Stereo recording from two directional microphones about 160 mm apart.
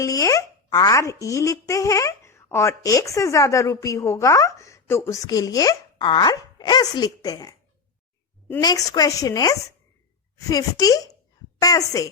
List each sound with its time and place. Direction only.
0.0 s a child's voice: 20° left (ahead or behind)
8.6 s a child's voice: 25° left (ahead or behind)